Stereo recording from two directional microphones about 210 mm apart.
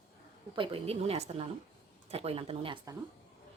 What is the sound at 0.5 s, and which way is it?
Speech, 25° right (ahead or behind).